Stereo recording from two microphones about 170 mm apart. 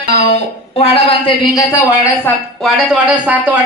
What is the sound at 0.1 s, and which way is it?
A woman's voice, 40° left (ahead or behind).